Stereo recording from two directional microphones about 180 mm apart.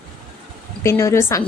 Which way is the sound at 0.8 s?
15° left (ahead or behind).